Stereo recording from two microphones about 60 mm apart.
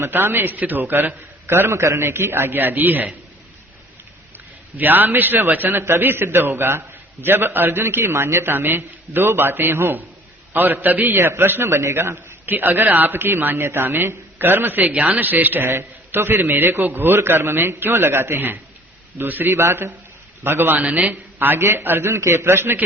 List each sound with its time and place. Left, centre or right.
0.0 s a man's voice: right
4.8 s a man's voice: right
12.5 s a man's voice: right
14.8 s a man's voice: right
19.5 s a man's voice: right
20.8 s speech: right
21.5 s a man's voice: right